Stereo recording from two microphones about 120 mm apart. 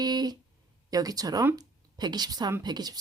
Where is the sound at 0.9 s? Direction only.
30° right (ahead or behind).